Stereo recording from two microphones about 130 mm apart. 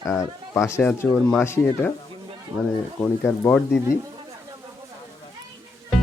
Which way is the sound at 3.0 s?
15° left (ahead or behind).